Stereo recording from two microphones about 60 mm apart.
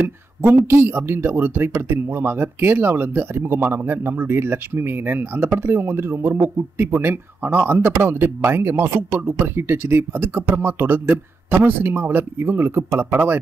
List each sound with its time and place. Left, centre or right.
0.6 s speech: right